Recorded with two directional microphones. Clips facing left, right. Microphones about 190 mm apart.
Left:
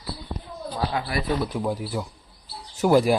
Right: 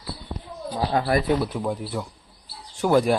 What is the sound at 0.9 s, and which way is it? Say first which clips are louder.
Speech: right 8 dB; 45° right (ahead or behind).